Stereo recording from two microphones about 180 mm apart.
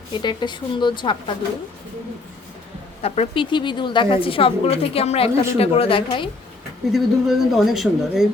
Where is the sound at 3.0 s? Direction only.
30° left (ahead or behind).